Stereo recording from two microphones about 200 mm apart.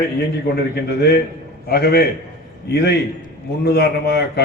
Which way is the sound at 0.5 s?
50° left (ahead or behind).